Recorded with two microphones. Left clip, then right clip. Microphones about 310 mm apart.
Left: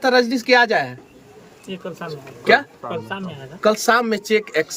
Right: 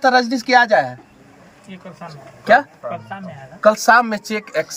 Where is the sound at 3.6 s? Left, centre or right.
Centre.